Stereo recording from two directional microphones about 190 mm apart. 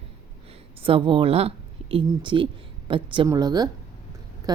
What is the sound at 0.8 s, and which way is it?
A woman's voice, 25° right (ahead or behind).